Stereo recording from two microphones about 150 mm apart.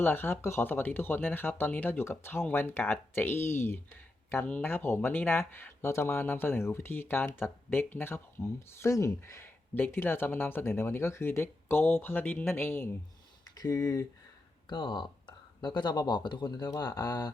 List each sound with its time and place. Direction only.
0.0 s speech: 15° left (ahead or behind)